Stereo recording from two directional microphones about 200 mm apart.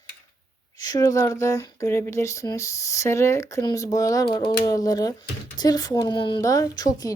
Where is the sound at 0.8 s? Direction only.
20° left (ahead or behind).